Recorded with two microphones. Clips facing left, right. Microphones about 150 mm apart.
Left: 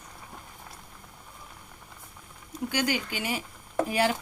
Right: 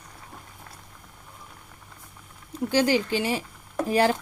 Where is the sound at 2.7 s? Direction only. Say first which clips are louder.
Right 8 dB; 30° right (ahead or behind).